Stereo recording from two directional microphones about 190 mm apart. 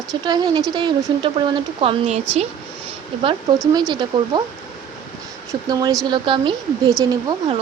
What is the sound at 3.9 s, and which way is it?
Speech, 25° right (ahead or behind).